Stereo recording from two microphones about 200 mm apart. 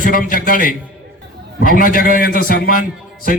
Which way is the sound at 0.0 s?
45° left (ahead or behind).